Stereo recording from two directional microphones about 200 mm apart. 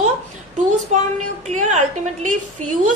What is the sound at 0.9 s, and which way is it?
Speech, 35° right (ahead or behind).